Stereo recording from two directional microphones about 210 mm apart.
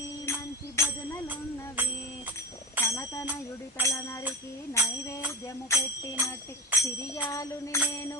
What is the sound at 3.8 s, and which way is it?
Speech, 15° left (ahead or behind).